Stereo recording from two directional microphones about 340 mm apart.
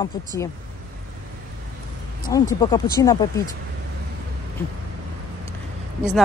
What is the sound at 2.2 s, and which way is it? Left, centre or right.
Speech, centre.